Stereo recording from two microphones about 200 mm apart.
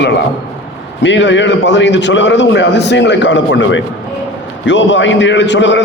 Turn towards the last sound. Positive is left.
turn(degrees=65)  # may be behind; listen again after turning